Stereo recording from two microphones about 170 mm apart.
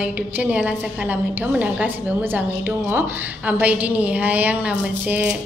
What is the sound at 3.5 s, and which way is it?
A woman's voice, 10° right (ahead or behind).